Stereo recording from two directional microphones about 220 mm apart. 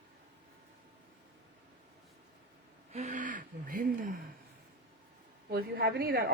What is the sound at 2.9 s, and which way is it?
Speech, 35° right (ahead or behind).